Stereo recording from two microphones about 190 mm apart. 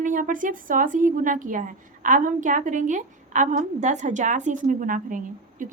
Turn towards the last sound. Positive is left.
turn(degrees=-45)  # may be behind; listen again after turning